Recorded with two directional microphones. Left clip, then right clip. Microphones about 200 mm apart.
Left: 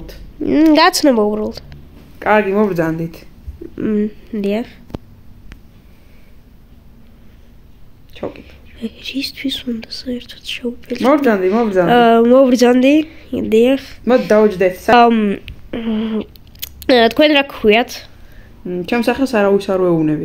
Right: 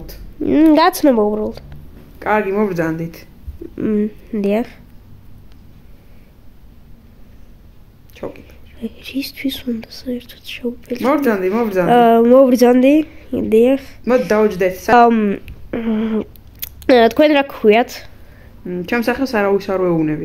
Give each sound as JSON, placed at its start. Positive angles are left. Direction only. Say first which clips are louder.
{"t": 0.4, "sound": "speech", "louder": "left 1 dB", "side_deg": -5}
{"t": 2.1, "sound": "speech", "louder": "left 3 dB", "side_deg": 20}
{"t": 3.7, "sound": "speech", "louder": "even", "side_deg": -5}
{"t": 8.3, "sound": "speech", "louder": "left 2 dB", "side_deg": -5}
{"t": 11.5, "sound": "speech", "louder": "left 3 dB", "side_deg": 30}
{"t": 11.9, "sound": "speech", "louder": "right 1 dB", "side_deg": -5}
{"t": 14.0, "sound": "speech", "louder": "left 3 dB", "side_deg": 25}
{"t": 14.9, "sound": "speech", "louder": "even", "side_deg": 0}
{"t": 18.7, "sound": "speech", "louder": "left 2 dB", "side_deg": 30}